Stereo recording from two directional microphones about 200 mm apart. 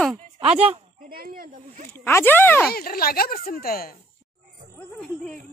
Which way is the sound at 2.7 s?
50° left (ahead or behind).